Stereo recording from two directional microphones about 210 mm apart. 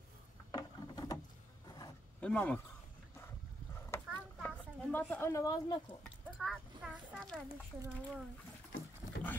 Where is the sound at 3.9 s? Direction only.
10° left (ahead or behind).